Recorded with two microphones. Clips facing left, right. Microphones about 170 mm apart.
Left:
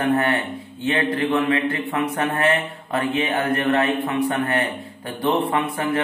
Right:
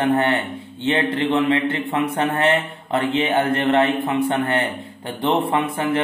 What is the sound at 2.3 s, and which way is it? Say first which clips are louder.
A man's voice: right 2 dB; 25° right (ahead or behind).